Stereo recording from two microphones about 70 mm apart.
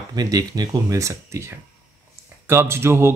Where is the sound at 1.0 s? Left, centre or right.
Right.